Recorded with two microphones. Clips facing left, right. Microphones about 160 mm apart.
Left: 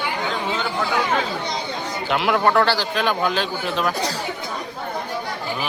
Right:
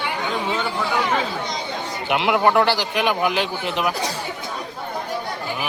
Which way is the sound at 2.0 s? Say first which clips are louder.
Right 1 dB; 20° right (ahead or behind).